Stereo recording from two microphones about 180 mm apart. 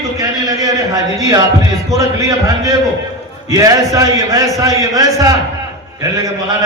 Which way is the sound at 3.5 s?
20° right (ahead or behind).